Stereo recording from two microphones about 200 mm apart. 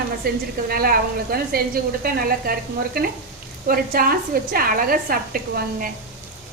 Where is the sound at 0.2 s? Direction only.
45° right (ahead or behind).